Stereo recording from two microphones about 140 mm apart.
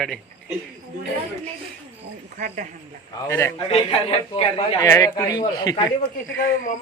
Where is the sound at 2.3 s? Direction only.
60° right (ahead or behind).